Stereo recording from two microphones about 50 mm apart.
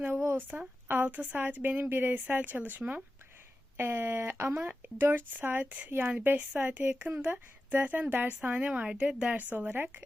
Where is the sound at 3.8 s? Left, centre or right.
Right.